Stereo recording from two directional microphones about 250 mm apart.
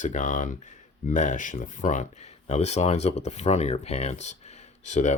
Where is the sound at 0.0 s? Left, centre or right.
Left.